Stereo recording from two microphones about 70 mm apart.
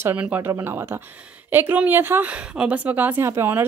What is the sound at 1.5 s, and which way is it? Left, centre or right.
A woman's voice, right.